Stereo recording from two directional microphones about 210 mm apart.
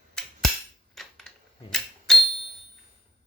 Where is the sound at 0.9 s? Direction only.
Centre (ahead or behind).